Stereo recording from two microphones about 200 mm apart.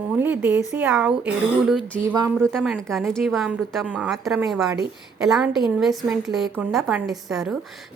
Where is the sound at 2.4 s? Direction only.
Centre (ahead or behind).